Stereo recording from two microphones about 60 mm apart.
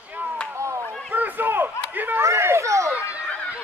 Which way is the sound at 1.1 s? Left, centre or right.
Right.